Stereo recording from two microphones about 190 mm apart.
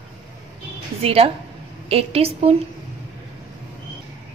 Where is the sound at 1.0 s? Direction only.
30° right (ahead or behind).